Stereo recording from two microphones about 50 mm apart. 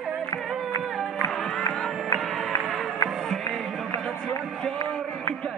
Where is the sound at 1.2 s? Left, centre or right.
Left.